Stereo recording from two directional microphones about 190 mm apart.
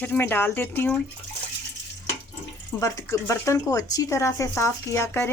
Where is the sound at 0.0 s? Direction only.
10° left (ahead or behind).